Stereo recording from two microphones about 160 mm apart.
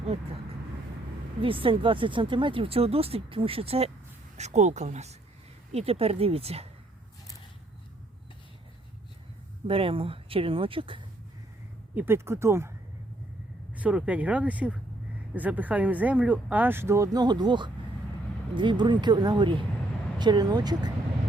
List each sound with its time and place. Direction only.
1.4 s speech: 35° right (ahead or behind)
9.6 s speech: 35° right (ahead or behind)
11.9 s speech: 15° right (ahead or behind)
13.7 s speech: 5° right (ahead or behind); by 20.9 s 25° right (ahead or behind)